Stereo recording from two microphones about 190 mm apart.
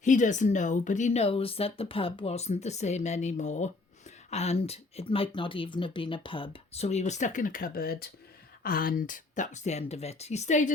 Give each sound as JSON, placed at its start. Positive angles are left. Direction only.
{"t": 0.0, "sound": "speech", "side_deg": 40}